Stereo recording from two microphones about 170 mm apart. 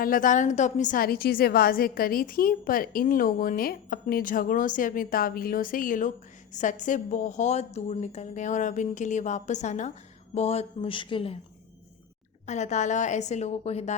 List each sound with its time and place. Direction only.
0.0 s a woman's voice: 50° left (ahead or behind); by 11.3 s 30° left (ahead or behind)
12.5 s a woman's voice: 45° left (ahead or behind)